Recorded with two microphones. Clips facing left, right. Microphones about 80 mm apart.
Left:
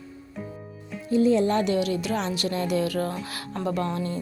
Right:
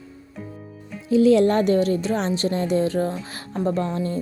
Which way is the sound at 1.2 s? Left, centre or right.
Right.